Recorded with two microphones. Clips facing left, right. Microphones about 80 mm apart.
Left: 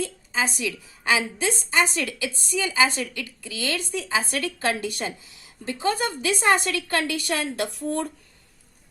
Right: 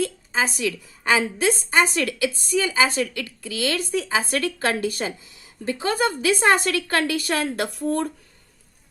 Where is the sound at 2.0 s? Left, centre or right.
Right.